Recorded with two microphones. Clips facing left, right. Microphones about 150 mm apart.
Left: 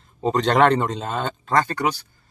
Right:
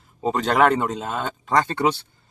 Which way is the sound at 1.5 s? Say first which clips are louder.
Right 1 dB; 20° right (ahead or behind).